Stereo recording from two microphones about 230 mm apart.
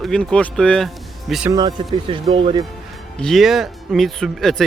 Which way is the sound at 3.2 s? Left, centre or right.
Centre.